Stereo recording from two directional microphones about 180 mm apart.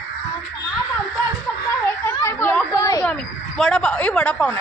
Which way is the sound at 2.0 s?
15° left (ahead or behind).